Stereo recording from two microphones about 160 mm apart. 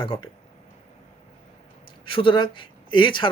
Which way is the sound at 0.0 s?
30° left (ahead or behind).